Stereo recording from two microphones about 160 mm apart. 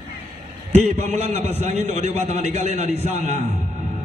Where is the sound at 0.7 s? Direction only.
45° right (ahead or behind).